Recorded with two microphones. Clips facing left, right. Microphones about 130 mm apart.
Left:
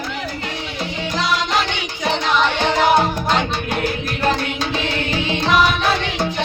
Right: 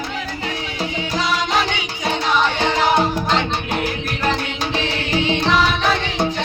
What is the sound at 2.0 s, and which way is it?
Music, 5° right (ahead or behind).